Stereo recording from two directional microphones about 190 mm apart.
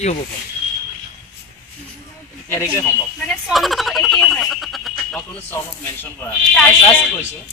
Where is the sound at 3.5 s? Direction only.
Centre (ahead or behind).